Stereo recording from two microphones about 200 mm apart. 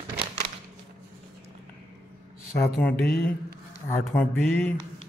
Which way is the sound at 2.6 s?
10° left (ahead or behind).